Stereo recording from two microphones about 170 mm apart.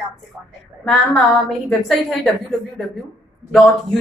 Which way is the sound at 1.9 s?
Centre (ahead or behind).